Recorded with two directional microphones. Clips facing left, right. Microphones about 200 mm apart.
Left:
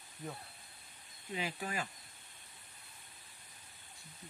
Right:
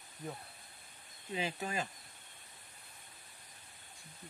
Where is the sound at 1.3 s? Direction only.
25° right (ahead or behind).